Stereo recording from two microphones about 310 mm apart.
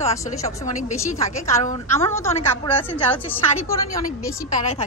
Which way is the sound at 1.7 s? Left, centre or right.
Centre.